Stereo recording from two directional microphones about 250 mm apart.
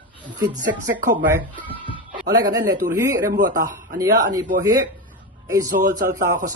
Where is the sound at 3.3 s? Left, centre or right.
Right.